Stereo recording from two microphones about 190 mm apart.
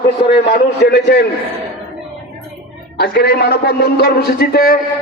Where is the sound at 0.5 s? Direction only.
55° left (ahead or behind).